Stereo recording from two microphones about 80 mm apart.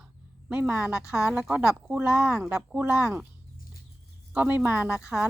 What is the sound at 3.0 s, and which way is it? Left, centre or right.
Speech, right.